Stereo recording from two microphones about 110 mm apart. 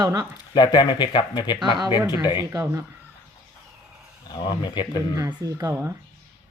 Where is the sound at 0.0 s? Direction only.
35° right (ahead or behind).